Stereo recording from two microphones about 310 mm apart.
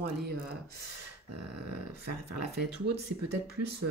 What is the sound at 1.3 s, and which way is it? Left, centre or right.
Speech, right.